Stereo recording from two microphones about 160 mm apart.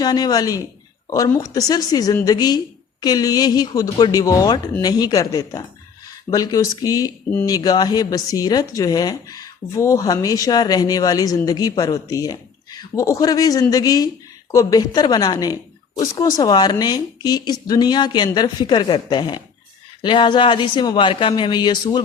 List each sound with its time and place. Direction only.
0.0 s speech: 25° left (ahead or behind)